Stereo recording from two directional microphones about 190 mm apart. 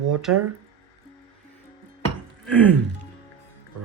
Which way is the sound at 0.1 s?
Centre (ahead or behind).